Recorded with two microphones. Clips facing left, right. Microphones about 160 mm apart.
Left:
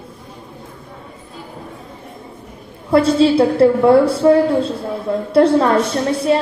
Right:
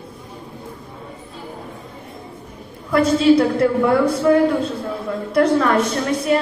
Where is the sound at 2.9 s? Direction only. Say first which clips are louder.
Left 2 dB; 30° left (ahead or behind).